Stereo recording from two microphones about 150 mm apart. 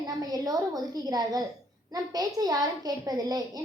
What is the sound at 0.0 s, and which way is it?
A woman's voice, 25° right (ahead or behind).